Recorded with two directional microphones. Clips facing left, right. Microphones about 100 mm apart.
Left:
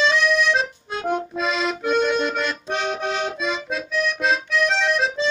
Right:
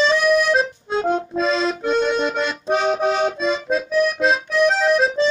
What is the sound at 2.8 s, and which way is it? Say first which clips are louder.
Accordion: right 6 dB; 35° right (ahead or behind).